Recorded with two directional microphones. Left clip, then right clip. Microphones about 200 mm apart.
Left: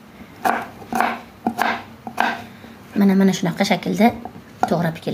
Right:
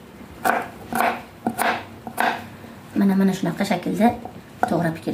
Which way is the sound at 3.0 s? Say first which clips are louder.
Left 4 dB; 40° left (ahead or behind).